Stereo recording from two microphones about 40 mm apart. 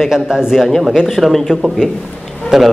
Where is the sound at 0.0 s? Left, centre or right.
Centre.